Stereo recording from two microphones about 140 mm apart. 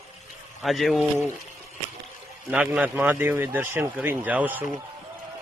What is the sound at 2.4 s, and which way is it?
A man's voice, 5° right (ahead or behind).